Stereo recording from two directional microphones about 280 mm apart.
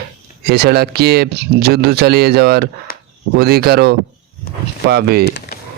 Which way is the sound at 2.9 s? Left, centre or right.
Left.